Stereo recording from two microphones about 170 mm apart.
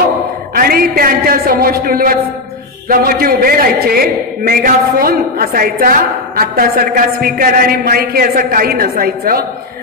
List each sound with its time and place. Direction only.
0.6 s a man's voice: 60° right (ahead or behind)